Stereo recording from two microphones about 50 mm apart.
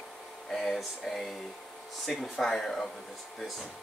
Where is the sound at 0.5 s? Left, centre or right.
Centre.